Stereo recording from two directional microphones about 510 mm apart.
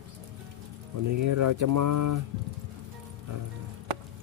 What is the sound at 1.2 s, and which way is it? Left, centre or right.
Speech, right.